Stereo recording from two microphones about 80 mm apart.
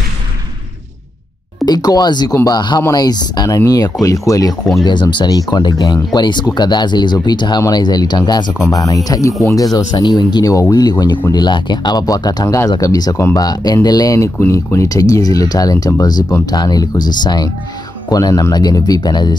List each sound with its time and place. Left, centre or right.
1.7 s speech: left
3.4 s speech: left
4.8 s speech: left
8.6 s speech: left
9.7 s speech: left
11.3 s speech: left
18.1 s speech: left